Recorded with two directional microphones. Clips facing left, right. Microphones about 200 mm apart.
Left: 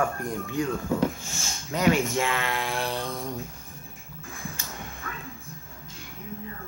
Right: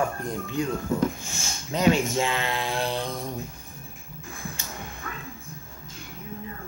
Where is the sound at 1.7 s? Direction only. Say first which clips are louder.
Right 1 dB; 25° right (ahead or behind).